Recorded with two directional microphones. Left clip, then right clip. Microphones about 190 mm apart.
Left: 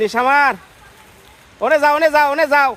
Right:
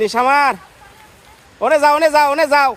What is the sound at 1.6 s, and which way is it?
Speech, 5° right (ahead or behind).